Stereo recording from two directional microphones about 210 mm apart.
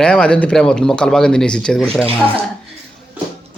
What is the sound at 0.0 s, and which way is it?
Speech, 5° left (ahead or behind).